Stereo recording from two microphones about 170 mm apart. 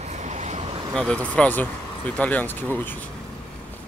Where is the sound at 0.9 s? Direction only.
5° left (ahead or behind).